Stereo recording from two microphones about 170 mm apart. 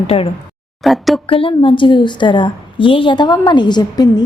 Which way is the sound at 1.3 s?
30° left (ahead or behind).